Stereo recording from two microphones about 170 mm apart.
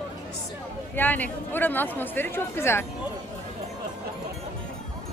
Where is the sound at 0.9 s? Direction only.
10° left (ahead or behind).